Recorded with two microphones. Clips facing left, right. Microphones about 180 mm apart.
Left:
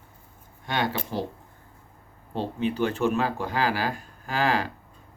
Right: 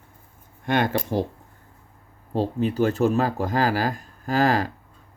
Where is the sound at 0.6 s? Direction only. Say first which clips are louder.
Right 5 dB; 50° right (ahead or behind).